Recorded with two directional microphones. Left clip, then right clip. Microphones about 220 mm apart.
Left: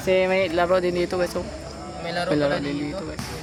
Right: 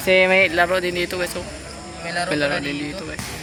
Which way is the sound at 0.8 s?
20° left (ahead or behind).